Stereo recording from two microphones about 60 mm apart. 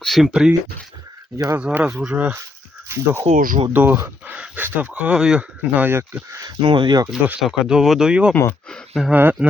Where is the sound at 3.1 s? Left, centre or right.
Right; by 5.4 s centre.